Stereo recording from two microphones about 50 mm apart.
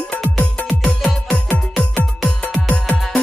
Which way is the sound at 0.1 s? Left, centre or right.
Left.